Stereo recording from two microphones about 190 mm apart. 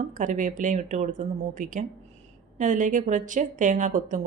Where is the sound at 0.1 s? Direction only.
45° right (ahead or behind).